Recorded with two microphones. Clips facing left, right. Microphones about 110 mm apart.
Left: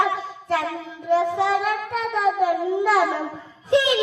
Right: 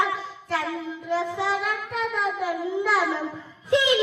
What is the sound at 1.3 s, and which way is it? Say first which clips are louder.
Child singing: left 5 dB; 55° left (ahead or behind).